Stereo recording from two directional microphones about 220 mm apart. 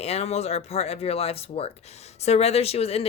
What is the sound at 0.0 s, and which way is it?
Speech, 30° left (ahead or behind).